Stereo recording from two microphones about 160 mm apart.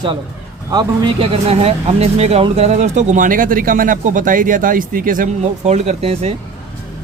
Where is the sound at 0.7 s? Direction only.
30° right (ahead or behind).